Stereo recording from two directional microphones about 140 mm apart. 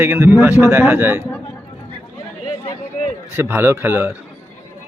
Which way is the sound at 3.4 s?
10° right (ahead or behind).